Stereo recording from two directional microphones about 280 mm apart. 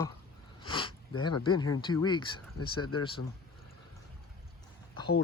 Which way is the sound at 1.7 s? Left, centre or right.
Centre.